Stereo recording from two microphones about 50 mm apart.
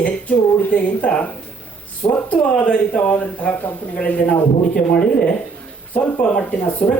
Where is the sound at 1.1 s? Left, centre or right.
Centre.